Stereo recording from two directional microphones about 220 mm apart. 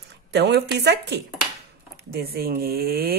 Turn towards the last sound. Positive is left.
turn(degrees=-45)  # may be behind; listen again after turning